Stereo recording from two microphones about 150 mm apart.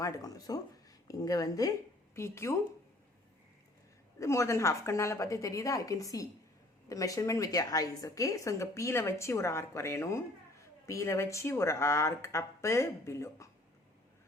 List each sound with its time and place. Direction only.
0.0 s a woman's voice: 25° left (ahead or behind)
4.2 s a woman's voice: 20° left (ahead or behind)